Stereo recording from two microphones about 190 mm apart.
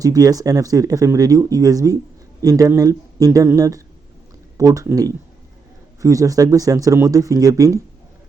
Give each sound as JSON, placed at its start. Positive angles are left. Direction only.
{"t": 0.0, "sound": "speech", "side_deg": -20}